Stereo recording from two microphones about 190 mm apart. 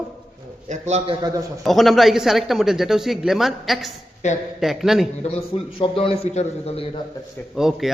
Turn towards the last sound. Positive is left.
turn(degrees=0)  # may be behind; listen again after turning